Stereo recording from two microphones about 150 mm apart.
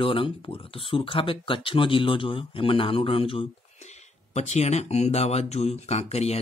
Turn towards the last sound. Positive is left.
turn(degrees=45)  # may be behind; listen again after turning